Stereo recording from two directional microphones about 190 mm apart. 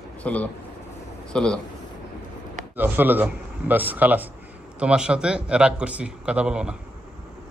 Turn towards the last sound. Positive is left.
turn(degrees=-5)  # may be behind; listen again after turning